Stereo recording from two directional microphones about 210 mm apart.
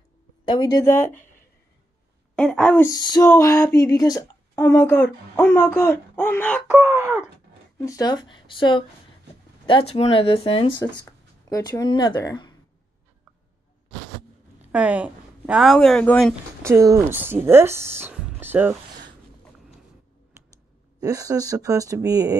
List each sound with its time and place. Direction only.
0.5 s a sound: 20° left (ahead or behind)
2.3 s speech: 5° left (ahead or behind)
2.9 s a sound: 20° left (ahead or behind)
6.7 s speech: 10° right (ahead or behind)
7.8 s a sound: 15° left (ahead or behind)
8.3 s speech: 25° left (ahead or behind)
14.6 s a woman's voice: 5° right (ahead or behind)
16.6 s speech: 15° right (ahead or behind)
21.0 s speech: 15° right (ahead or behind)